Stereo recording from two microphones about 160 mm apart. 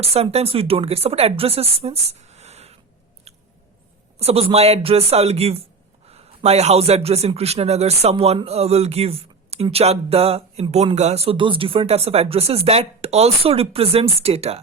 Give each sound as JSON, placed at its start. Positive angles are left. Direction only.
{"t": 0.0, "sound": "speech", "side_deg": -40}
{"t": 3.3, "sound": "scissors", "side_deg": -40}
{"t": 4.2, "sound": "speech", "side_deg": -40}